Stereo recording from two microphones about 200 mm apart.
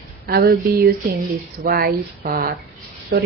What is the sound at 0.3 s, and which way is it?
Speech, 50° right (ahead or behind).